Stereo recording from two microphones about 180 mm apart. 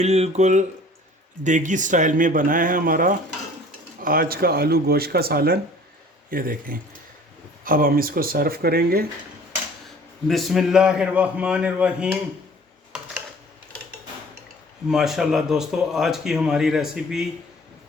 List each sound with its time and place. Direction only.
0.0 s speech: 35° right (ahead or behind); by 9.0 s 55° right (ahead or behind)
10.2 s speech: centre (ahead or behind)
14.8 s speech: centre (ahead or behind)